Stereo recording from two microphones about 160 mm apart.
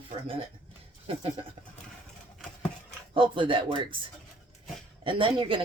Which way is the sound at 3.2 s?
30° right (ahead or behind).